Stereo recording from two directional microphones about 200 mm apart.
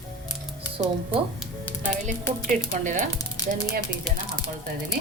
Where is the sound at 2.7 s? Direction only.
40° right (ahead or behind).